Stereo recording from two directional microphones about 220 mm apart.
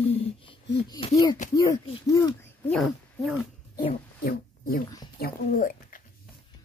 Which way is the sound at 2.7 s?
Centre (ahead or behind).